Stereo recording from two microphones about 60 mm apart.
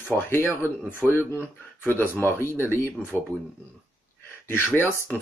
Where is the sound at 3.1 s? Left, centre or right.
Right.